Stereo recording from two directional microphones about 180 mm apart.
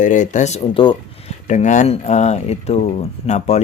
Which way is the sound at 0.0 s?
45° left (ahead or behind).